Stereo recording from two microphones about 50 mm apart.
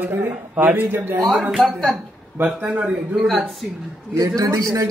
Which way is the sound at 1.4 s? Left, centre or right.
Centre.